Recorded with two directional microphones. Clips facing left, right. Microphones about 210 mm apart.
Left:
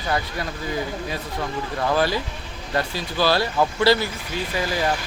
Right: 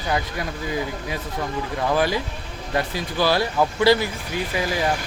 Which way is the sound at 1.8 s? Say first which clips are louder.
Even; 15° right (ahead or behind).